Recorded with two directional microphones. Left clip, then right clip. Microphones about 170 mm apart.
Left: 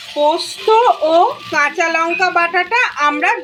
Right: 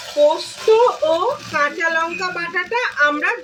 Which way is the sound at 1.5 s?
30° left (ahead or behind).